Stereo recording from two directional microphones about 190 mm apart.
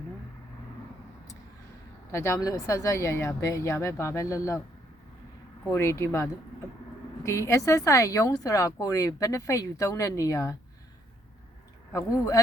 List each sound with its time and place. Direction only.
2.1 s a woman's voice: 15° left (ahead or behind)
5.7 s a woman's voice: 15° left (ahead or behind)
11.9 s a woman's voice: 15° left (ahead or behind)